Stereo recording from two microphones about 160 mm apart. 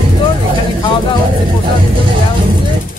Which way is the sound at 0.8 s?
30° left (ahead or behind).